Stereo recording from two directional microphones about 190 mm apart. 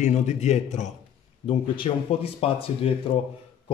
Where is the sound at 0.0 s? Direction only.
40° left (ahead or behind).